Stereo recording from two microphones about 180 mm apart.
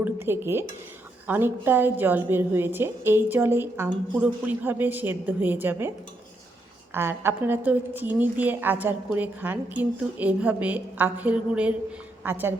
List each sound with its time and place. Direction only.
0.0 s a woman's voice: 15° right (ahead or behind)
6.9 s a woman's voice: 15° right (ahead or behind)